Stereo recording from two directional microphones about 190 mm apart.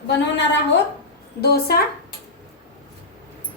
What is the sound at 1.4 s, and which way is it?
Speech, 55° left (ahead or behind).